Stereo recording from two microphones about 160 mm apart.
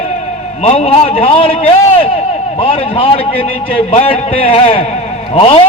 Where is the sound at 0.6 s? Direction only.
40° left (ahead or behind).